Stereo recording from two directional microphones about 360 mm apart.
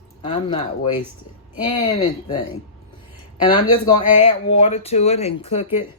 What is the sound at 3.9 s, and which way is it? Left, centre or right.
Speech, centre.